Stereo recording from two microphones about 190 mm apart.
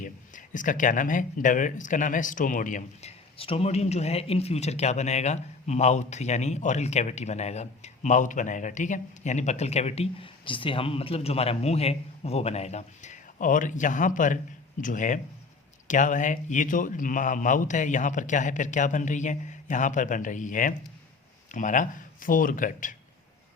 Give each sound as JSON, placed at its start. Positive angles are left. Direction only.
{"t": 0.0, "sound": "speech", "side_deg": 45}